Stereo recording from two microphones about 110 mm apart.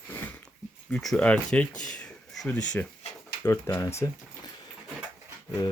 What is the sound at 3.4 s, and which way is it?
Speech, 25° left (ahead or behind).